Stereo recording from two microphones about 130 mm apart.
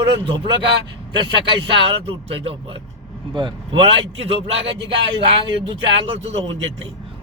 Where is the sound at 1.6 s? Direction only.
40° right (ahead or behind).